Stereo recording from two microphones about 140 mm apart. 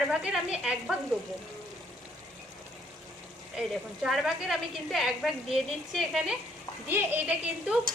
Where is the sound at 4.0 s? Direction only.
Centre (ahead or behind).